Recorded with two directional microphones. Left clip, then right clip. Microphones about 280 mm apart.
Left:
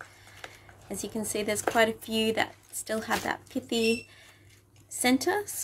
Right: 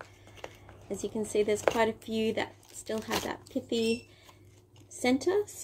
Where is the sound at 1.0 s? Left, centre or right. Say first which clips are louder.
Right 3 dB; left.